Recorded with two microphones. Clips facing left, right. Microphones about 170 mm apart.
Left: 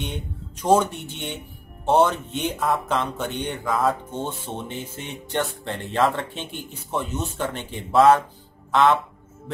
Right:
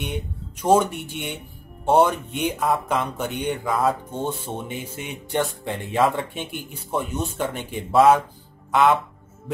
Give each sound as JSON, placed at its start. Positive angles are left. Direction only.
{"t": 0.0, "sound": "speech", "side_deg": -10}